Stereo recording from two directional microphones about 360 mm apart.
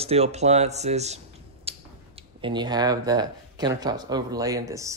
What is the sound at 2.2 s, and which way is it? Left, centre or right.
Speech, centre.